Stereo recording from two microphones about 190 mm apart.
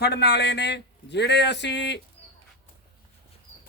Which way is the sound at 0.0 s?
60° left (ahead or behind).